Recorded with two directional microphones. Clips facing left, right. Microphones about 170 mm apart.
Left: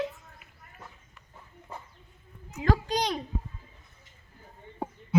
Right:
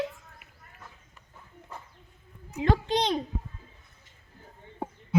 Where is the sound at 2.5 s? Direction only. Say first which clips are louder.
Right 2 dB; 25° right (ahead or behind).